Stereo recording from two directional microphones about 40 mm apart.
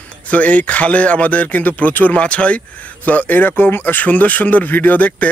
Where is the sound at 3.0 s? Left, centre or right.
Left.